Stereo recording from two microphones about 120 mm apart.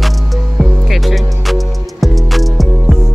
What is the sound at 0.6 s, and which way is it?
Music, centre (ahead or behind).